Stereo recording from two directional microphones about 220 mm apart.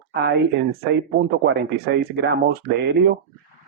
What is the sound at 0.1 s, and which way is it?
Speech, 50° right (ahead or behind).